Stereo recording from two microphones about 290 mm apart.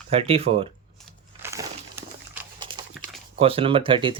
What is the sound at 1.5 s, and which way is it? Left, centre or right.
Crumpling, centre.